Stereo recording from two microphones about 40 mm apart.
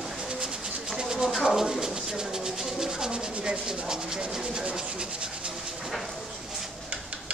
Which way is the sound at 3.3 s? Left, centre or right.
Right.